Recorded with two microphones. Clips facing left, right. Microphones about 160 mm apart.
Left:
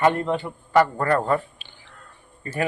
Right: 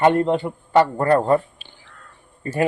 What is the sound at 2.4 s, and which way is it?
Speech, 35° right (ahead or behind).